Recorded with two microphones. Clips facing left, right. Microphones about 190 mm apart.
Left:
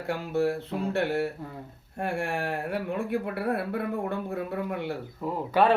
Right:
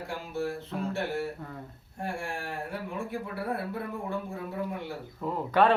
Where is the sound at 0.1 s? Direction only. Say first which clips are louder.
Left 8 dB; 60° left (ahead or behind).